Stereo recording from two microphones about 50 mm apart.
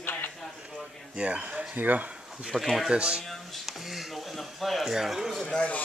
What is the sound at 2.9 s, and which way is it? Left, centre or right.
Speech, centre.